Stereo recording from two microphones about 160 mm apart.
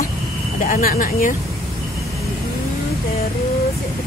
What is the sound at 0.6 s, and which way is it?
Speech, 60° left (ahead or behind).